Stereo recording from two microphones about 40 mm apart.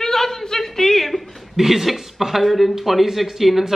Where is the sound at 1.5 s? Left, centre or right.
Centre.